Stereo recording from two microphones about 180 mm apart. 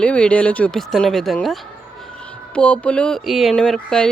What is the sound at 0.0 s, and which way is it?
Speech, 5° left (ahead or behind).